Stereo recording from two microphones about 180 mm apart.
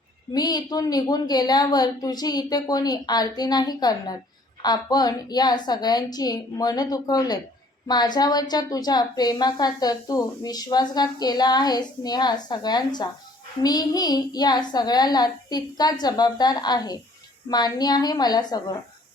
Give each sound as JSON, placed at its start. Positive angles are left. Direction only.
{"t": 0.3, "sound": "a woman's voice", "side_deg": 20}